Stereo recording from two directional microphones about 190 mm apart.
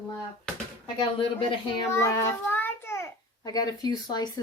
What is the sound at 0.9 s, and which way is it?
Speech, 25° left (ahead or behind).